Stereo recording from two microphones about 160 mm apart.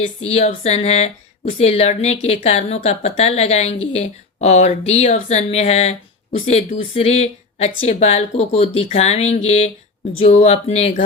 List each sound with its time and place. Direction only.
0.2 s speech: 40° left (ahead or behind)